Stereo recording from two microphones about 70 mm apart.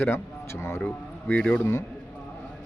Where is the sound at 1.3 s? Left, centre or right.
Centre.